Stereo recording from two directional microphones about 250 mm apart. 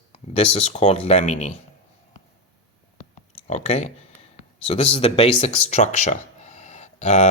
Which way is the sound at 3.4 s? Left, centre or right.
Left.